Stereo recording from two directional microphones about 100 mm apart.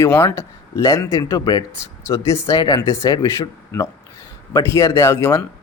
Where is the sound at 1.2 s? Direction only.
40° left (ahead or behind).